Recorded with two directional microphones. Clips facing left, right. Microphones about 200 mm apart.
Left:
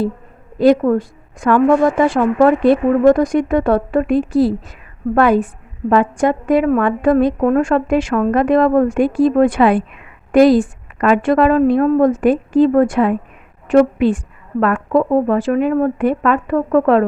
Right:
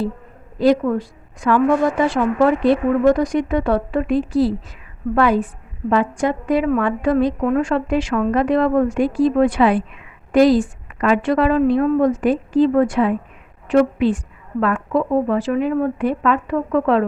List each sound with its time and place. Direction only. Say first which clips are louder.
0.6 s a woman's voice: left 4 dB; 50° left (ahead or behind)